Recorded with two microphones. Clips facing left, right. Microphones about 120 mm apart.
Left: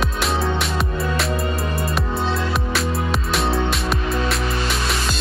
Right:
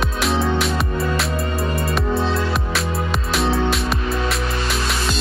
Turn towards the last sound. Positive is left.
turn(degrees=0)  # may be behind; listen again after turning